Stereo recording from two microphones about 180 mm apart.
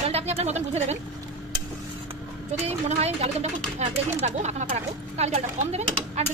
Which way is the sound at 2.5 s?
35° right (ahead or behind).